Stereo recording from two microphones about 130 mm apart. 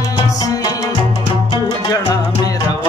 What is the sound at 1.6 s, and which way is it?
Music, 25° left (ahead or behind).